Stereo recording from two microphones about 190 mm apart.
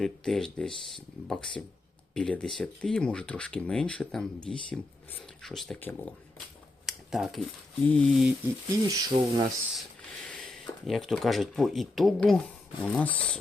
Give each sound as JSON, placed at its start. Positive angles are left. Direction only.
{"t": 0.0, "sound": "speech", "side_deg": 0}
{"t": 6.8, "sound": "a sound", "side_deg": 0}
{"t": 7.8, "sound": "speech", "side_deg": 10}
{"t": 8.7, "sound": "speech", "side_deg": -20}
{"t": 10.4, "sound": "speech", "side_deg": 0}